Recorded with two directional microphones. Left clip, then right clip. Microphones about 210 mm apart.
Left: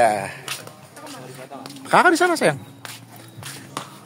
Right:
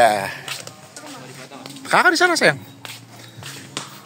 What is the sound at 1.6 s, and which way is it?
A man's voice, 5° left (ahead or behind).